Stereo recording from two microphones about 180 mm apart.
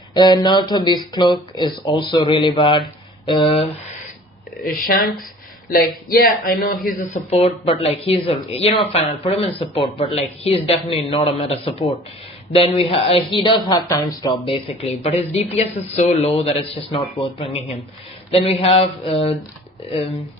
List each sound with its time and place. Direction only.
0.1 s speech: 25° left (ahead or behind)
6.1 s speech: 55° left (ahead or behind)
6.8 s speech: 40° left (ahead or behind)